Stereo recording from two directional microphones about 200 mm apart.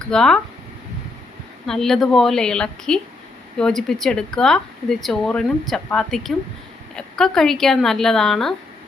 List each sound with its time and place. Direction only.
0.1 s speech: 5° left (ahead or behind)
1.6 s speech: centre (ahead or behind)